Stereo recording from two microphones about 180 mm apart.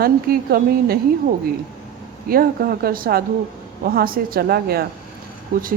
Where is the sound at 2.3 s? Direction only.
55° right (ahead or behind).